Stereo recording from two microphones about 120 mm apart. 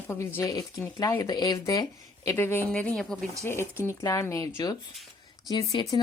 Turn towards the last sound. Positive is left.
turn(degrees=40)  # may be behind; listen again after turning